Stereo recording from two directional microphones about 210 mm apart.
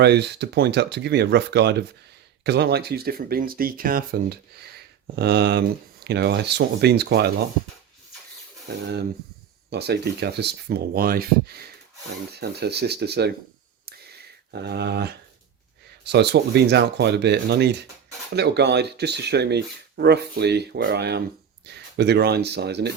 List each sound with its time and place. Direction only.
0.0 s speech: 55° right (ahead or behind)
9.6 s speech: 50° right (ahead or behind)
14.5 s speech: 50° right (ahead or behind)